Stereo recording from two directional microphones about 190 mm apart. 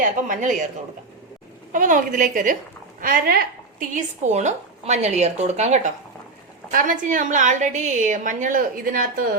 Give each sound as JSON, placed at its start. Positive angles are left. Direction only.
{"t": 0.0, "sound": "a woman's voice", "side_deg": -45}
{"t": 1.7, "sound": "a woman's voice", "side_deg": -45}